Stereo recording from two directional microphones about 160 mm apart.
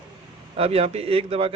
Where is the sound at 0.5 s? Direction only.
35° right (ahead or behind).